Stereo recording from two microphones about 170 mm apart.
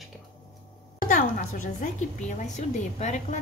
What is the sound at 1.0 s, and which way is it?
Speech, 50° left (ahead or behind).